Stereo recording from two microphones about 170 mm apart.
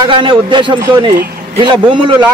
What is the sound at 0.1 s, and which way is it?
A man's voice, 30° right (ahead or behind).